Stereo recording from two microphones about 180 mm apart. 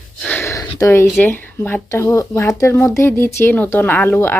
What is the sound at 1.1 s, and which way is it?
Speech, 10° left (ahead or behind).